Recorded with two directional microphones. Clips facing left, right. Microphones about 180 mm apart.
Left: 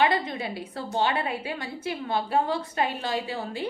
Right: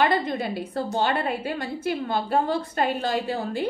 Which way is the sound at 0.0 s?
45° right (ahead or behind).